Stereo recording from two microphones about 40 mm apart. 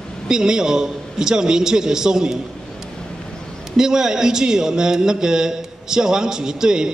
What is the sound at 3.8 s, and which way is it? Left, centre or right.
A man's voice, centre.